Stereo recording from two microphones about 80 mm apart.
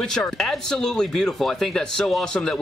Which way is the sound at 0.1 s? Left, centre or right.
Centre.